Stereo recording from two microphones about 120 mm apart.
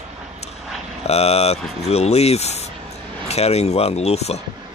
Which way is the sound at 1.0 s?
60° left (ahead or behind).